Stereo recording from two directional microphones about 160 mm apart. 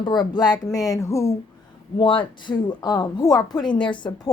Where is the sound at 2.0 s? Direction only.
30° left (ahead or behind).